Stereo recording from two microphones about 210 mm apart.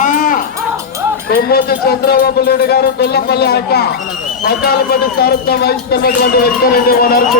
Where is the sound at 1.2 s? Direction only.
50° left (ahead or behind).